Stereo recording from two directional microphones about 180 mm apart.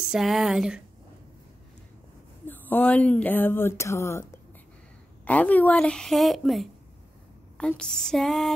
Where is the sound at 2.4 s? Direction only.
10° left (ahead or behind).